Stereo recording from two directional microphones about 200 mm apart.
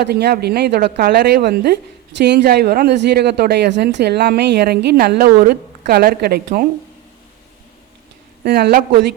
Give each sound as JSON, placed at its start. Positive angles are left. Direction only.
{"t": 0.0, "sound": "a woman's voice", "side_deg": -55}
{"t": 8.4, "sound": "a woman's voice", "side_deg": -50}